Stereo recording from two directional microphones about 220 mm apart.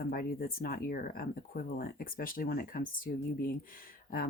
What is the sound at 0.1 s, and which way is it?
Speech, 40° left (ahead or behind).